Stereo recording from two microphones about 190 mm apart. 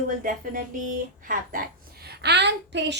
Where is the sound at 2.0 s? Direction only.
65° right (ahead or behind).